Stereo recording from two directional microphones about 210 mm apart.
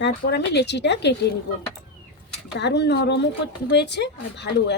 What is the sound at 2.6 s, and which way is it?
Speech, 55° left (ahead or behind).